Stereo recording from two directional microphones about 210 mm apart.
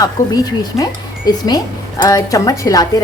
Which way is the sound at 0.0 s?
15° left (ahead or behind).